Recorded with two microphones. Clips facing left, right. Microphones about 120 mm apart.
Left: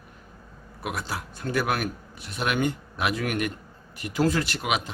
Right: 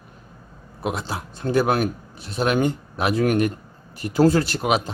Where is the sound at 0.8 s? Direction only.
25° right (ahead or behind).